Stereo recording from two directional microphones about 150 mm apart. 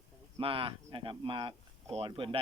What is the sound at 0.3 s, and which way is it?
Speech, 35° right (ahead or behind).